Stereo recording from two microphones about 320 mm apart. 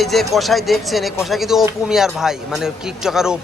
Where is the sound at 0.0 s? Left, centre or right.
Centre.